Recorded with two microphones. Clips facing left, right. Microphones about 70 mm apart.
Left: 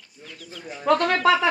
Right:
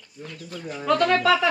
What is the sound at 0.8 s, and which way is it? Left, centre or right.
Speech, left.